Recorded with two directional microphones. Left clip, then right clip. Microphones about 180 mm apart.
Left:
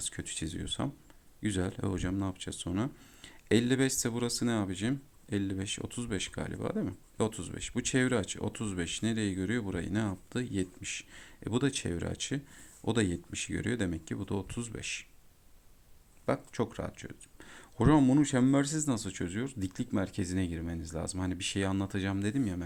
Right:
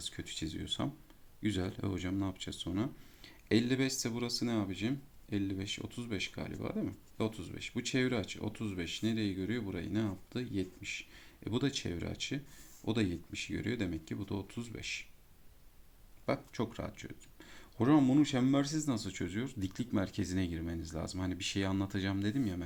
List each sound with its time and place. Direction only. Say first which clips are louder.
0.0 s speech: left 2 dB; 40° left (ahead or behind)
16.2 s speech: left 4 dB; 35° left (ahead or behind)